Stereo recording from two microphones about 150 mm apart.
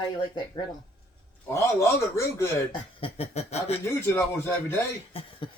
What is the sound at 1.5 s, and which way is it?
A man's voice, 20° left (ahead or behind).